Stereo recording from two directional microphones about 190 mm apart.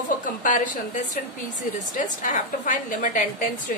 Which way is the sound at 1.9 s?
45° left (ahead or behind).